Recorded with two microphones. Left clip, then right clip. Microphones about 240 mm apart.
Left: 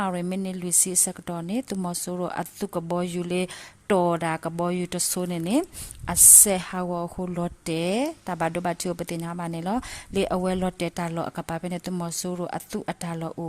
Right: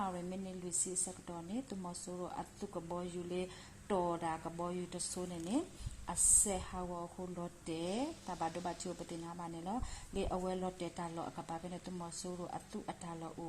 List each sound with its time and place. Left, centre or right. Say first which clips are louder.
0.0 s a woman's voice: left 13 dB; left